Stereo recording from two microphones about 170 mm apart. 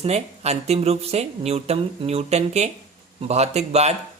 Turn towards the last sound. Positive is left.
turn(degrees=-40)  # may be behind; listen again after turning